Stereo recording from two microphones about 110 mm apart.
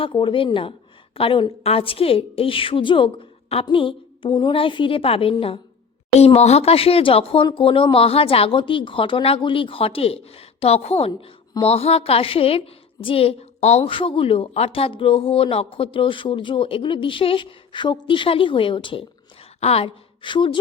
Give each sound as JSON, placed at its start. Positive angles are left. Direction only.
{"t": 0.0, "sound": "a woman's voice", "side_deg": 50}
{"t": 6.1, "sound": "a woman's voice", "side_deg": 75}
{"t": 13.8, "sound": "speech", "side_deg": 55}
{"t": 19.5, "sound": "a woman's voice", "side_deg": 65}
{"t": 20.2, "sound": "speech", "side_deg": 45}